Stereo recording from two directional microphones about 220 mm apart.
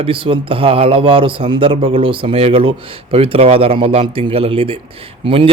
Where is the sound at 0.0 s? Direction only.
25° right (ahead or behind).